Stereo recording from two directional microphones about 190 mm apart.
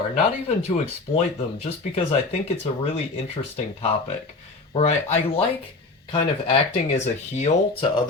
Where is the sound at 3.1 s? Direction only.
30° left (ahead or behind).